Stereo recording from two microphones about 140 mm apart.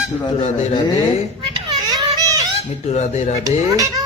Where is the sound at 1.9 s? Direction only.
30° right (ahead or behind).